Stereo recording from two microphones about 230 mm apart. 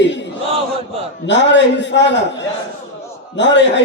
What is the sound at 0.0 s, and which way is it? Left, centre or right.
Chant, left.